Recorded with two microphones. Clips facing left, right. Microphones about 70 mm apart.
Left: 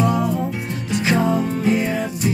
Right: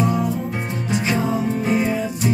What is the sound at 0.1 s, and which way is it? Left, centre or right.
Music, centre.